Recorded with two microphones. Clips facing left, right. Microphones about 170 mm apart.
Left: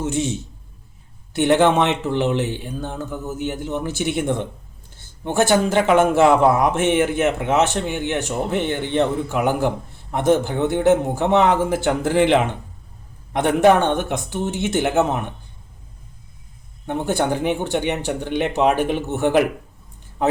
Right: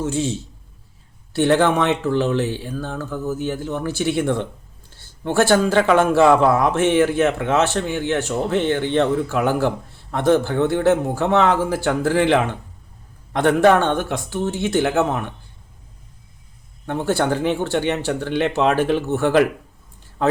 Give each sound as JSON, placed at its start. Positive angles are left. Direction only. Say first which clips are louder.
{"t": 0.0, "sound": "speech", "louder": "even", "side_deg": 20}
{"t": 16.8, "sound": "speech", "louder": "right 1 dB", "side_deg": 15}